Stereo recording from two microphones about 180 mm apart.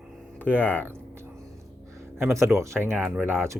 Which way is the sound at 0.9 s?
15° right (ahead or behind).